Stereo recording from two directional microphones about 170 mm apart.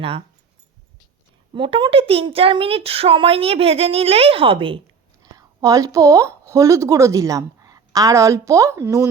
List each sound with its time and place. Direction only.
1.5 s a woman's voice: 30° right (ahead or behind)
5.2 s a woman's voice: 20° right (ahead or behind)